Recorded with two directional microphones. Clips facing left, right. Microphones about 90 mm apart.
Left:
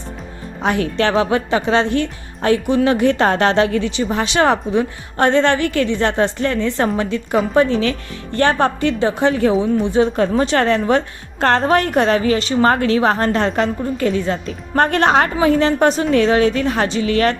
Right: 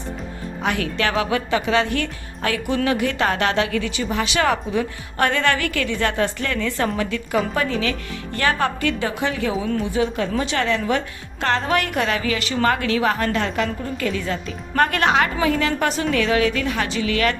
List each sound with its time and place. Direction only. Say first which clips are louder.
0.6 s a woman's voice: left 5 dB; 30° left (ahead or behind)